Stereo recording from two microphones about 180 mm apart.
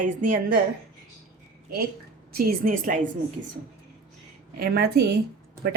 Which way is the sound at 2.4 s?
55° right (ahead or behind).